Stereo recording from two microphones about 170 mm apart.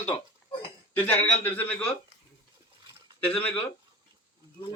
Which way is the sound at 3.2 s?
10° left (ahead or behind).